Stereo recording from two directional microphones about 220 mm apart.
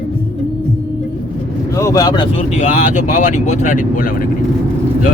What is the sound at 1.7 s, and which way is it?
Speech, 15° left (ahead or behind).